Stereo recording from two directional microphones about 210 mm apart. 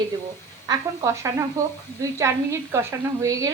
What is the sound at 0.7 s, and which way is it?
A woman's voice, 15° right (ahead or behind).